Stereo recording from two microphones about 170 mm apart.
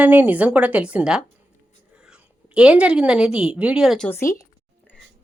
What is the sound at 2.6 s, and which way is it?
Speech, 5° right (ahead or behind).